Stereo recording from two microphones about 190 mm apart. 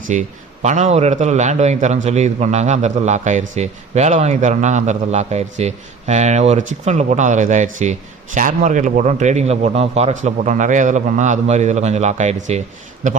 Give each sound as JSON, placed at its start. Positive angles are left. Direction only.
{"t": 0.1, "sound": "a man's voice", "side_deg": -40}